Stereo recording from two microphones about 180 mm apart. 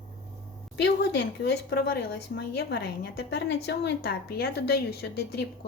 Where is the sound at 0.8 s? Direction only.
75° left (ahead or behind).